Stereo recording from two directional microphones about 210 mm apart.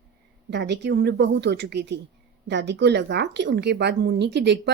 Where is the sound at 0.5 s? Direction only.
55° right (ahead or behind).